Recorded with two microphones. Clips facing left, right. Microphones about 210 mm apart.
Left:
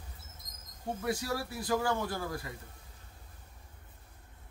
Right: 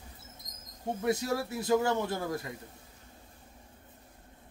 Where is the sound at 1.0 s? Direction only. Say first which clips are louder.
Right 5 dB; 25° right (ahead or behind).